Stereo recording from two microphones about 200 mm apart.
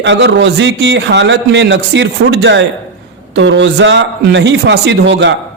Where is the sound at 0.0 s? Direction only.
60° right (ahead or behind).